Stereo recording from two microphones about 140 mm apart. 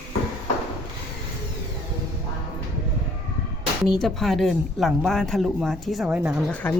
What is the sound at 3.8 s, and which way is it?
Speech, centre (ahead or behind).